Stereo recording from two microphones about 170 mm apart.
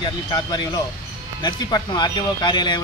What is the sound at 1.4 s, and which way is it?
Speech, 25° left (ahead or behind).